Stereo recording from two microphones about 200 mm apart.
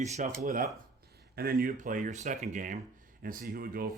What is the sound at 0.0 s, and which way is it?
Speech, 35° right (ahead or behind).